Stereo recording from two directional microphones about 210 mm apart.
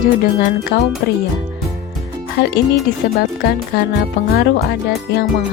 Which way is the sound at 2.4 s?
55° left (ahead or behind).